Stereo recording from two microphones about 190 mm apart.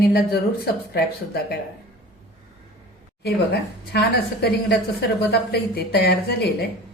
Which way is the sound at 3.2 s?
60° left (ahead or behind).